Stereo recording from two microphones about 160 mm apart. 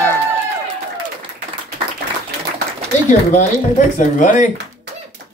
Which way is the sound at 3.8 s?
55° left (ahead or behind).